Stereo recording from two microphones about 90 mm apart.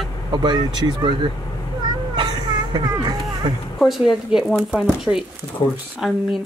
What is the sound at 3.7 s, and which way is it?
Speech, centre (ahead or behind).